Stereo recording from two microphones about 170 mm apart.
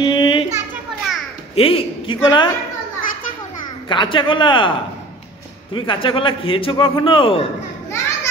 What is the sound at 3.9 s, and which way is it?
Speech, 30° left (ahead or behind).